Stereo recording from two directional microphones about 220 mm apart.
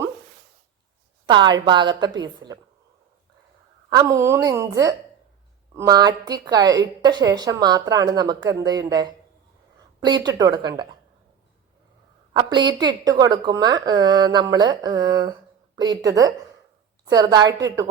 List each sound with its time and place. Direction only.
1.3 s a woman's voice: 20° right (ahead or behind)
3.8 s a woman's voice: 15° right (ahead or behind)
12.3 s a woman's voice: 20° right (ahead or behind)